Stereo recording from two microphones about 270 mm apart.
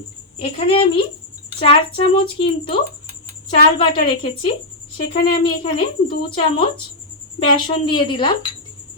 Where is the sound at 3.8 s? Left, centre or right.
Centre.